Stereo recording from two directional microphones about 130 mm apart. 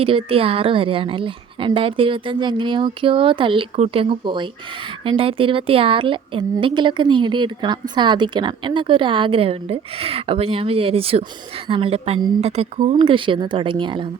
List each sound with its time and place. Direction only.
0.0 s a woman's voice: 45° right (ahead or behind)